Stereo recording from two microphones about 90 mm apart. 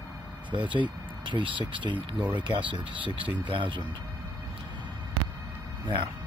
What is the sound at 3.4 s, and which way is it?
Speech, 65° right (ahead or behind).